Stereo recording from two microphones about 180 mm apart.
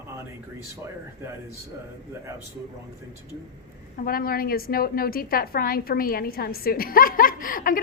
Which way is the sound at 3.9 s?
55° left (ahead or behind).